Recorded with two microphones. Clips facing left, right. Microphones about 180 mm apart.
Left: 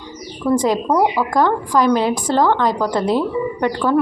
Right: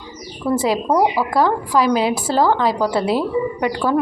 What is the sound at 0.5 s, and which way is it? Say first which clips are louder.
A woman's voice: left 1 dB; 5° right (ahead or behind).